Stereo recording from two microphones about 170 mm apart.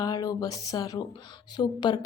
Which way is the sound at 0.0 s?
20° left (ahead or behind).